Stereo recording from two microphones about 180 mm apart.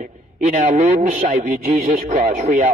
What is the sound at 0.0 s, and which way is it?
A man's voice, 40° right (ahead or behind).